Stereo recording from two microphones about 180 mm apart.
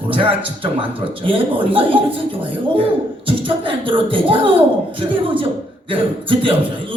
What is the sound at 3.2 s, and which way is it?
A man's voice, 30° right (ahead or behind).